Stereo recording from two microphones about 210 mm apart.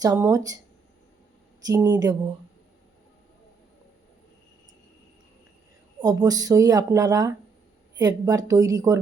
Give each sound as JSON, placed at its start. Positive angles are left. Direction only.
{"t": 0.0, "sound": "speech", "side_deg": -15}
{"t": 1.6, "sound": "speech", "side_deg": -15}
{"t": 6.0, "sound": "speech", "side_deg": -15}